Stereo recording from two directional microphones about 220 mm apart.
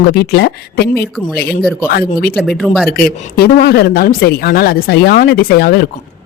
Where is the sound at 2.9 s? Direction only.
45° left (ahead or behind).